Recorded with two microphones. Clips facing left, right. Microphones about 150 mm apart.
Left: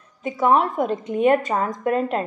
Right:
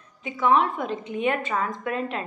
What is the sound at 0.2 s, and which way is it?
A woman's voice, 45° left (ahead or behind).